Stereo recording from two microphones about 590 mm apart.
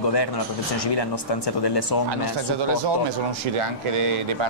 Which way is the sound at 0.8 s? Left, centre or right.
Left.